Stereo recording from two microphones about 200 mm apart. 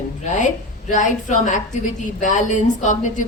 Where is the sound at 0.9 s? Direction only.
40° left (ahead or behind).